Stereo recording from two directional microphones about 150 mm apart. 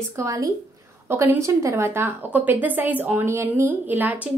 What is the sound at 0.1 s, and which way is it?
A woman's voice, 20° right (ahead or behind).